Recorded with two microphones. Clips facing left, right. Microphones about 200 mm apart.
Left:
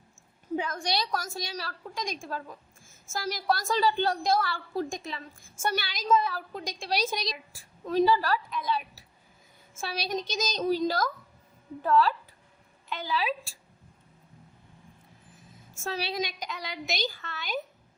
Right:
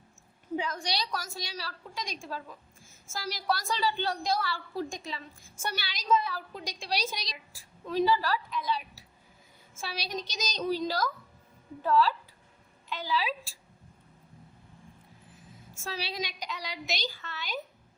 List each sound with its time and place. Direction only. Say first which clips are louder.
0.5 s a woman's voice: left 3 dB; 50° left (ahead or behind)
15.7 s a woman's voice: left 5 dB; 50° left (ahead or behind)